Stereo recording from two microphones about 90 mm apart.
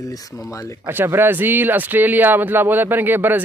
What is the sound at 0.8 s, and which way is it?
Speech, 25° right (ahead or behind).